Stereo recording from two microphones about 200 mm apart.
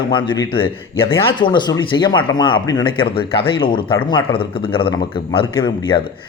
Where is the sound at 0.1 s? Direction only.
25° left (ahead or behind).